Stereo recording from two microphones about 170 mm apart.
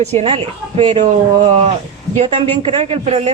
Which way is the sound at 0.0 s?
40° right (ahead or behind).